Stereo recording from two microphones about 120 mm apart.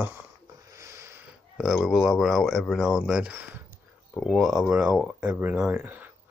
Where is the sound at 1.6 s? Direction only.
5° right (ahead or behind).